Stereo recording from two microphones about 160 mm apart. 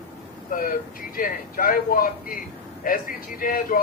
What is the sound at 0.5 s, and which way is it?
Speech, 60° left (ahead or behind).